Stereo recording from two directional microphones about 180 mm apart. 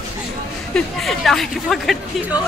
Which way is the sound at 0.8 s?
Centre (ahead or behind).